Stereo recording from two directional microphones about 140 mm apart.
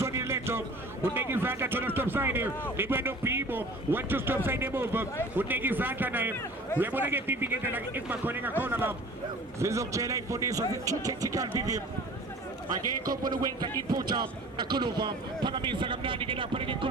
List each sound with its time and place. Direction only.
0.0 s a sound: 20° right (ahead or behind)
1.1 s a man's voice: 15° right (ahead or behind)
13.2 s a man's voice: 30° right (ahead or behind)